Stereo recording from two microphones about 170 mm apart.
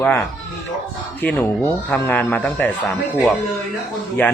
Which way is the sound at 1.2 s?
10° left (ahead or behind).